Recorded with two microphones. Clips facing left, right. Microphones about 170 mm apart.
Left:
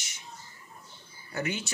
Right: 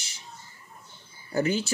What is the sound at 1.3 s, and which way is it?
Speech, 35° right (ahead or behind).